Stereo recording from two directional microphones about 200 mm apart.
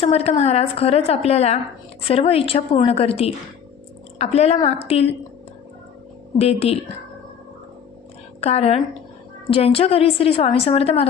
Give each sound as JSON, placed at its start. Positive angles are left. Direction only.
{"t": 0.0, "sound": "a woman's voice", "side_deg": 30}
{"t": 6.4, "sound": "a woman's voice", "side_deg": 30}
{"t": 8.4, "sound": "a woman's voice", "side_deg": 30}